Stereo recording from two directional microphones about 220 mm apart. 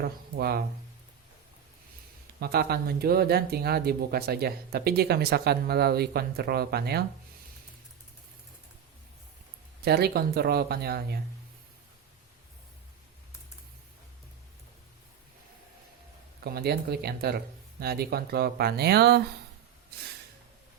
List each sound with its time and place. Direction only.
0.0 s speech: 45° right (ahead or behind)
2.4 s speech: 45° right (ahead or behind)
9.8 s speech: 45° right (ahead or behind)
16.4 s speech: 45° right (ahead or behind)